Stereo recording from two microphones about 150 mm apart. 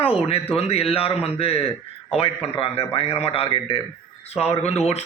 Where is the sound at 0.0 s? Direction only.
40° left (ahead or behind).